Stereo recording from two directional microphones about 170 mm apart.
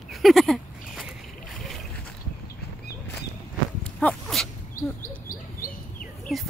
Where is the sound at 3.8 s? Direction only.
5° left (ahead or behind).